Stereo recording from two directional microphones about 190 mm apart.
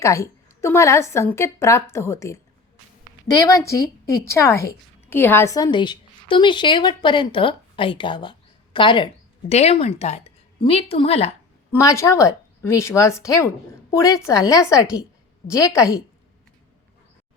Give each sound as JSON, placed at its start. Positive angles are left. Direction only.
{"t": 0.0, "sound": "a woman's voice", "side_deg": 15}
{"t": 11.7, "sound": "a woman's voice", "side_deg": 15}